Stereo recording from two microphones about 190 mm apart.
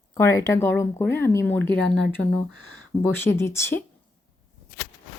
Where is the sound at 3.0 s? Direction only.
10° left (ahead or behind).